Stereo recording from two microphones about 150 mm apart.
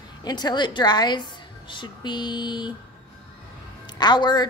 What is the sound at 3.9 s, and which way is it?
Speech, 30° left (ahead or behind).